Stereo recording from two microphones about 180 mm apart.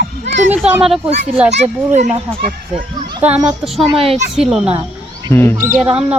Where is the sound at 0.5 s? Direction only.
5° right (ahead or behind).